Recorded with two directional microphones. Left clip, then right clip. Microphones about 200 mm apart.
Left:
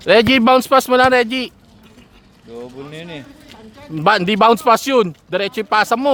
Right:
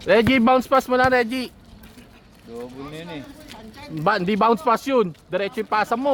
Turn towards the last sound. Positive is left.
turn(degrees=40)  # may be behind; listen again after turning